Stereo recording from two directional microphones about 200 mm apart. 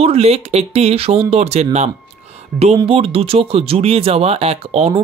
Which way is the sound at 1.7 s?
35° right (ahead or behind).